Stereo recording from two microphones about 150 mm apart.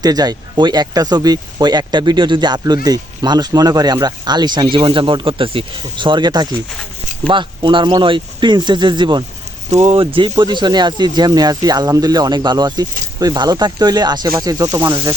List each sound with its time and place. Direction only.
0.0 s speech: 25° right (ahead or behind)
9.6 s speech: 50° right (ahead or behind)
10.0 s speech: 35° right (ahead or behind)